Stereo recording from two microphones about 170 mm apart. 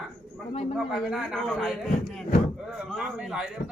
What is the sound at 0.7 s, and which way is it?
Speech, centre (ahead or behind).